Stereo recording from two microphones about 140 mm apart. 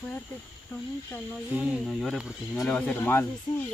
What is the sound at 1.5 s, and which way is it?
Speech, 10° right (ahead or behind).